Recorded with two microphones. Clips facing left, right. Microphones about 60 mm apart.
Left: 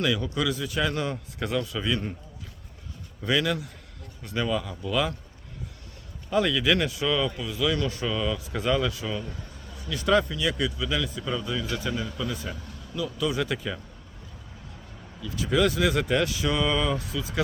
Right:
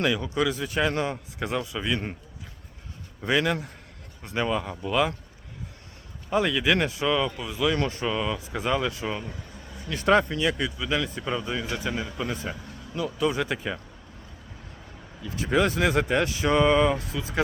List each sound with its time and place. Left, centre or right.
0.3 s a man's voice: right
3.2 s a man's voice: right
6.3 s a man's voice: right
12.1 s speech: right
15.2 s speech: right